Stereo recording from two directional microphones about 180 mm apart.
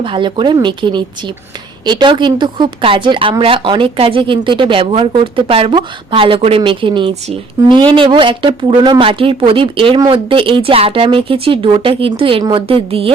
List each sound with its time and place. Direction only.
0.0 s a woman's voice: 25° right (ahead or behind)